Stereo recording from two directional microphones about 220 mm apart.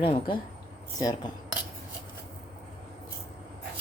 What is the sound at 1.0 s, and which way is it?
Cutlery, 15° left (ahead or behind).